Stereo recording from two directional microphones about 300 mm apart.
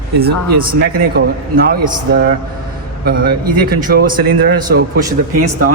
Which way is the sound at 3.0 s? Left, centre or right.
Right.